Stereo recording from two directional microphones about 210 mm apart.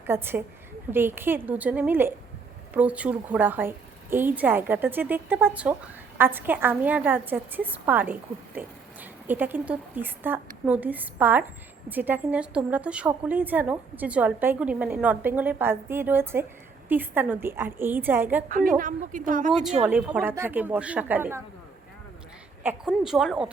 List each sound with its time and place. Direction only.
0.1 s a woman's voice: 10° right (ahead or behind)
18.4 s a woman's voice: 40° right (ahead or behind)
19.5 s a woman's voice: centre (ahead or behind)
22.6 s speech: 5° right (ahead or behind)